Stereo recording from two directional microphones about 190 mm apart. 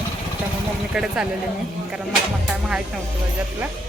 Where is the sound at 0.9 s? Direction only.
5° right (ahead or behind).